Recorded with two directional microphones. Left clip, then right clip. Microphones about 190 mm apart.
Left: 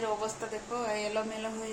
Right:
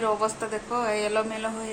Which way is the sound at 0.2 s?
15° right (ahead or behind).